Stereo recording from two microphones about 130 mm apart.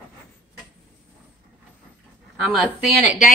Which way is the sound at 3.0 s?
80° left.